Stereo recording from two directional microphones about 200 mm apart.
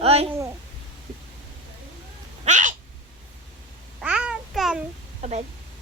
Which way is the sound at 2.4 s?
40° right (ahead or behind).